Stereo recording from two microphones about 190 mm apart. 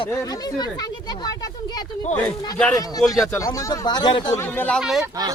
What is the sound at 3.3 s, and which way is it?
Speech, 20° left (ahead or behind).